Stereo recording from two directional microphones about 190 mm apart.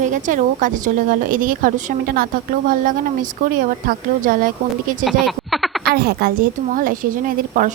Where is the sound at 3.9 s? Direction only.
45° right (ahead or behind).